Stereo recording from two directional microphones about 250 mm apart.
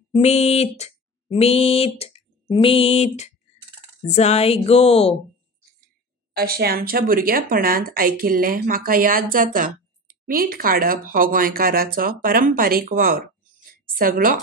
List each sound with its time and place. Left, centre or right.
0.1 s a sound: left
4.1 s speech: left
6.3 s speech: right